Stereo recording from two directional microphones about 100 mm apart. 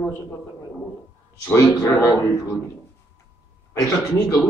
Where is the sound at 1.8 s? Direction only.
25° left (ahead or behind).